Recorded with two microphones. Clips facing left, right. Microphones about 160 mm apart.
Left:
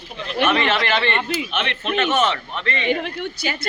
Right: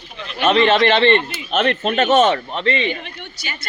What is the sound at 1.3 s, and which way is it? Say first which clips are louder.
Speech: right 6 dB; 50° right (ahead or behind).